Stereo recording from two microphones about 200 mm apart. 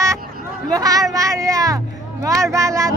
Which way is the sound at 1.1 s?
15° right (ahead or behind).